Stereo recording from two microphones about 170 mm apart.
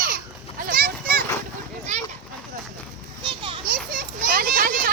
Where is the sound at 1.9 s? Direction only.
40° right (ahead or behind).